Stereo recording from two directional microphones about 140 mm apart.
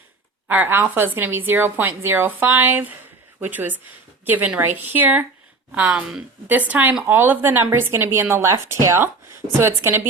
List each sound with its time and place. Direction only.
0.4 s a woman's voice: 15° right (ahead or behind)